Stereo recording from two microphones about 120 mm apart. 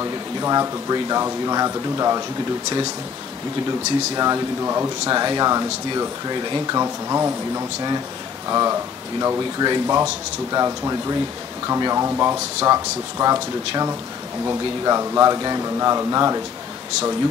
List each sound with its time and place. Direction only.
0.0 s speech: 30° right (ahead or behind)
4.1 s speech: 30° right (ahead or behind)